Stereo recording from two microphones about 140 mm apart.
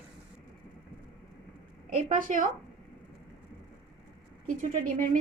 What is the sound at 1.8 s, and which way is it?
Speech, 75° right (ahead or behind).